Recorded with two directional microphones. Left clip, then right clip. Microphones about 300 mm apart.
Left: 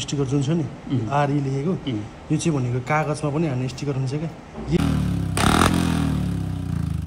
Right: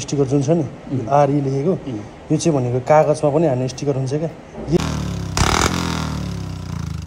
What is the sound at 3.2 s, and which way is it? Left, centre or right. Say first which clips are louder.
Speech: right 10 dB; right.